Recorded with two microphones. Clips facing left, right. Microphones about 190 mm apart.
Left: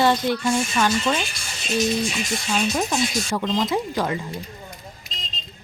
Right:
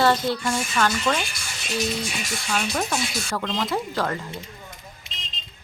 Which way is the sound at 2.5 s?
20° left (ahead or behind).